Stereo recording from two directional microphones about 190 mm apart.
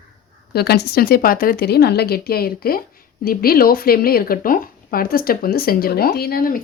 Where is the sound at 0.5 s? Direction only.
55° left (ahead or behind).